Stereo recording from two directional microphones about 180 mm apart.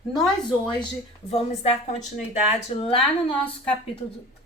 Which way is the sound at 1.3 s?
35° left (ahead or behind).